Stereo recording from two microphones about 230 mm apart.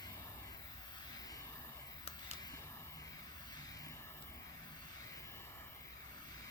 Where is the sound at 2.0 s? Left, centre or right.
Centre.